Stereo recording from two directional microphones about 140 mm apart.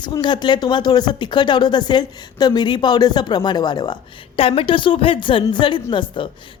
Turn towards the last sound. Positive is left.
turn(degrees=35)  # may be behind; listen again after turning